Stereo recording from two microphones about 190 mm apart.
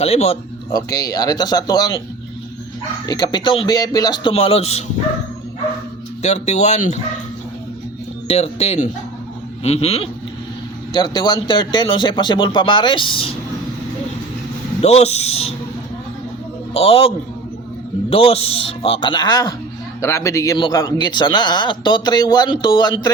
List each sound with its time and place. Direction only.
0.0 s speech: 35° left (ahead or behind)
0.7 s a man's voice: 20° left (ahead or behind)
3.1 s a man's voice: 20° left (ahead or behind)
6.2 s speech: 35° left (ahead or behind)
8.3 s speech: 35° left (ahead or behind)
10.9 s a man's voice: 20° left (ahead or behind)
14.8 s speech: 35° left (ahead or behind)
16.7 s speech: 30° left (ahead or behind)
18.1 s a man's voice: 30° left (ahead or behind)